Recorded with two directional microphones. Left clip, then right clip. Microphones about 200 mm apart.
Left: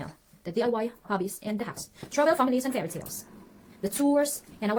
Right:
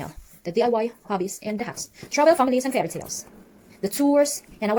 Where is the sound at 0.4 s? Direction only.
15° right (ahead or behind).